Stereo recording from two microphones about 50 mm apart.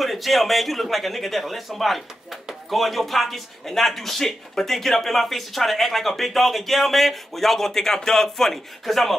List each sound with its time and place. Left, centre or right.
0.0 s speech: centre